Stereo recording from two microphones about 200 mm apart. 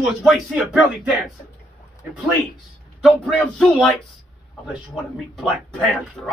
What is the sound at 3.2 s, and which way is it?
A man's voice, centre (ahead or behind).